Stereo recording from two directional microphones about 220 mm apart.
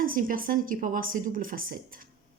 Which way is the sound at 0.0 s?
40° right (ahead or behind).